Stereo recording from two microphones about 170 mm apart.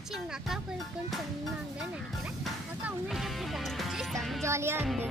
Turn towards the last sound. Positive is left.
turn(degrees=-15)  # may be behind; listen again after turning